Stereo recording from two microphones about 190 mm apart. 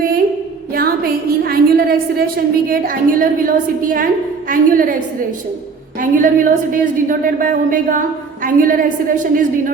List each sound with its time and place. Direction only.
0.7 s a woman's voice: 50° right (ahead or behind)
6.0 s a woman's voice: 45° right (ahead or behind)